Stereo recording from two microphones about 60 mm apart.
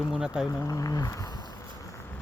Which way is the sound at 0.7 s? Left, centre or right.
Left.